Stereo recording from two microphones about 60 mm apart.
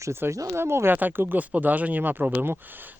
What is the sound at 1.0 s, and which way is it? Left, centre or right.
Speech, right.